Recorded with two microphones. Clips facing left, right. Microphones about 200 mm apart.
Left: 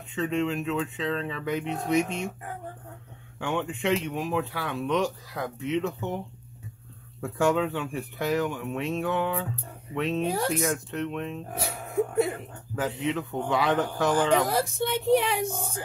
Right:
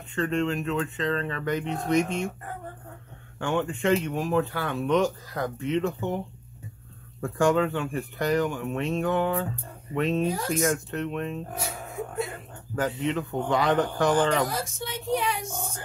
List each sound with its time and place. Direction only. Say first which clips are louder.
0.1 s speech: right 1 dB; 5° left (ahead or behind)
3.3 s speech: right 2 dB; centre (ahead or behind)
12.7 s speech: right 1 dB; centre (ahead or behind)
14.5 s speech: left 6 dB; 60° left (ahead or behind)